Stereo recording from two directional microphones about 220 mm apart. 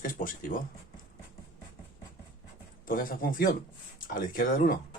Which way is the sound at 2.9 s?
40° left (ahead or behind).